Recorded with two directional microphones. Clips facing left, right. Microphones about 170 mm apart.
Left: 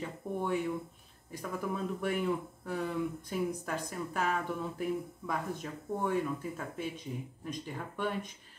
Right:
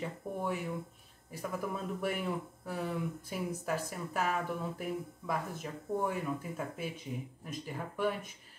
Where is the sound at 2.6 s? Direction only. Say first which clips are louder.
Left 2 dB; 5° right (ahead or behind).